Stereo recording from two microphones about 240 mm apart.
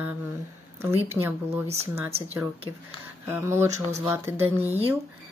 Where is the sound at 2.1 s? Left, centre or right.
Right.